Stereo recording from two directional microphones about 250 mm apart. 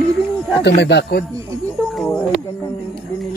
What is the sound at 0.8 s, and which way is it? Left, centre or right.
Speech, left.